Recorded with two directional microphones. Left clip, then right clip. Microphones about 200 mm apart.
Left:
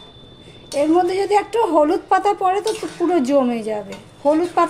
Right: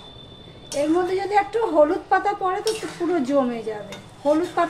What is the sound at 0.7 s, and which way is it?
A woman's voice, 45° left (ahead or behind).